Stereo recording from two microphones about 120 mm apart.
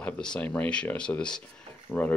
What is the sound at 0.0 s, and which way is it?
Speech, 10° left (ahead or behind).